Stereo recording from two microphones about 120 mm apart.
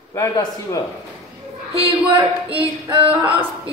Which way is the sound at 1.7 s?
50° right (ahead or behind).